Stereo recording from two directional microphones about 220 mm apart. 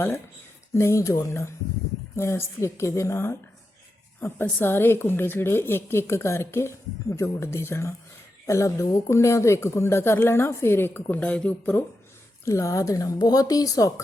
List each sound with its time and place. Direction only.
0.7 s a woman's voice: 10° left (ahead or behind)